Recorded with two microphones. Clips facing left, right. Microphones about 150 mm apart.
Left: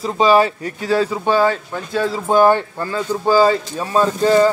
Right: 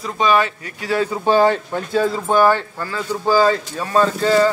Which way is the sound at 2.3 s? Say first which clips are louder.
Left 3 dB; 20° left (ahead or behind).